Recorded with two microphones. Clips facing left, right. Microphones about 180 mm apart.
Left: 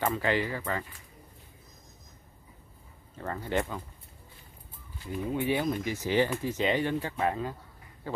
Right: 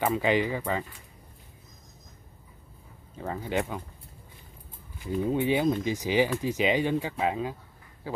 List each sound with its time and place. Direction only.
0.0 s speech: 15° right (ahead or behind)
3.2 s speech: 10° right (ahead or behind)
5.0 s speech: 20° right (ahead or behind)